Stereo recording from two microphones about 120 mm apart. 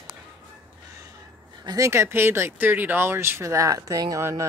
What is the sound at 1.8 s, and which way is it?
Speech, 20° right (ahead or behind).